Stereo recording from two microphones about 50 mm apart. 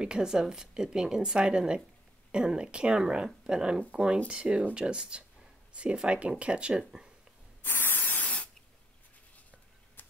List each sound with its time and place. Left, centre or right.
0.0 s a woman's voice: centre
6.8 s a woman's voice: centre
7.6 s spray: left
10.0 s a sound: left